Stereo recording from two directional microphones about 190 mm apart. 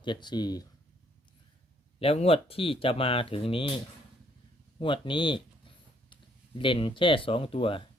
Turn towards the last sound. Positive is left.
turn(degrees=30)  # may be behind; listen again after turning